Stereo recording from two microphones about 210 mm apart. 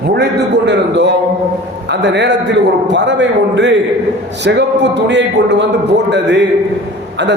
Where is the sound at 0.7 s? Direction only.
55° right (ahead or behind).